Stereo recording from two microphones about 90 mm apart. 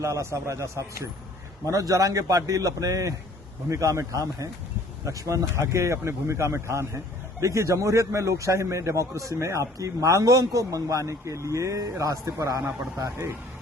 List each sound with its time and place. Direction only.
0.0 s a man's voice: 35° right (ahead or behind)